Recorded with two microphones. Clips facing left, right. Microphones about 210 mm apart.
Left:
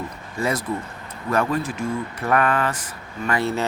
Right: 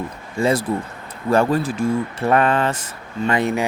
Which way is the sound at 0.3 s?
25° right (ahead or behind).